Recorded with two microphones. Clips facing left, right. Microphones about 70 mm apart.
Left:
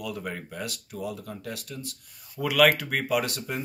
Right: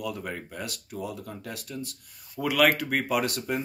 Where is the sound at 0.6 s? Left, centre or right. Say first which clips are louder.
Left 1 dB; right.